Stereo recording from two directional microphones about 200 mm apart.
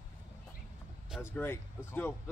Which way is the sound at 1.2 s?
10° left (ahead or behind).